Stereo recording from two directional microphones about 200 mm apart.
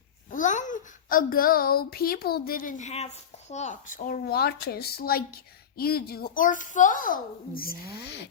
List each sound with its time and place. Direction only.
0.3 s a child's voice: 40° left (ahead or behind)